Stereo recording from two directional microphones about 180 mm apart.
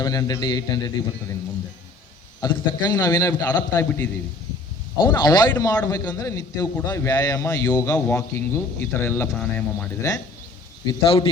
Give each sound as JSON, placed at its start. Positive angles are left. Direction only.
{"t": 0.0, "sound": "a man's voice", "side_deg": 20}
{"t": 2.4, "sound": "a man's voice", "side_deg": 20}
{"t": 5.0, "sound": "a man's voice", "side_deg": 25}
{"t": 10.8, "sound": "a man's voice", "side_deg": 30}